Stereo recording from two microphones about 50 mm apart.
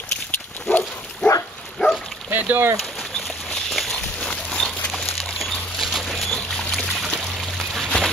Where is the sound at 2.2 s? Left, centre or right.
Right.